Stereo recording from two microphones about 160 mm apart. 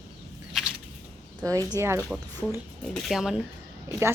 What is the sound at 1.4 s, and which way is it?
Speech, 20° right (ahead or behind).